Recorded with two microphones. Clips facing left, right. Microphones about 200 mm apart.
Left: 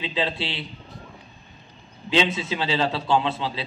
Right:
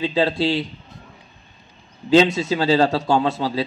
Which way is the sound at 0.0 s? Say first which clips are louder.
Right 8 dB; 45° right (ahead or behind).